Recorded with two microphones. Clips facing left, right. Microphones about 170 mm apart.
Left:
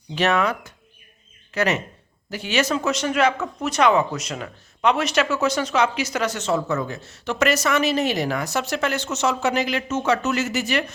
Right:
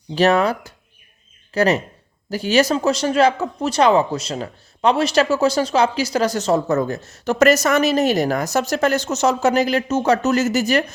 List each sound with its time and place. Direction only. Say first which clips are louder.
0.1 s speech: right 5 dB; 35° right (ahead or behind)